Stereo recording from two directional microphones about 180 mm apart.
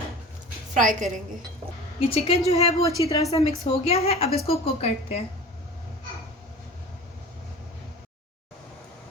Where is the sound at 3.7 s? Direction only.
35° left (ahead or behind).